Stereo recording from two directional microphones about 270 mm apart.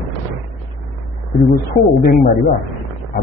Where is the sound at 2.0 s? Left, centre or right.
Left.